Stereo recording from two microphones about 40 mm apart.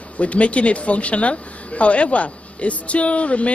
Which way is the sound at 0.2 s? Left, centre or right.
Left.